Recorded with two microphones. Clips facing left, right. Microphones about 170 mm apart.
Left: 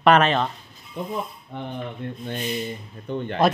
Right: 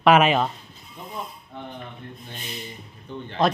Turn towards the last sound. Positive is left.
turn(degrees=60)  # may be behind; listen again after turning